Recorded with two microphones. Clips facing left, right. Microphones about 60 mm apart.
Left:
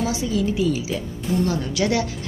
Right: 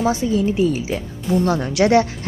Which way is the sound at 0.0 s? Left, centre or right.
Right.